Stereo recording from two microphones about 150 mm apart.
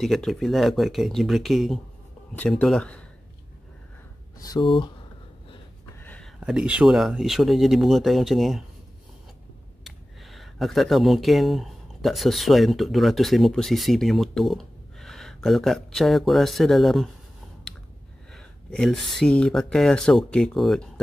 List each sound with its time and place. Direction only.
0.0 s speech: centre (ahead or behind)
4.4 s speech: 30° left (ahead or behind)
5.9 s a sound: 10° left (ahead or behind)
6.4 s speech: 5° right (ahead or behind)
9.8 s speech: centre (ahead or behind)
17.7 s a sound: 5° left (ahead or behind)
18.3 s speech: centre (ahead or behind)